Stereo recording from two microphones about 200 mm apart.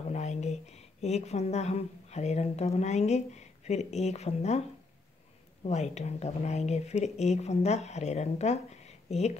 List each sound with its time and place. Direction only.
0.1 s speech: 35° left (ahead or behind)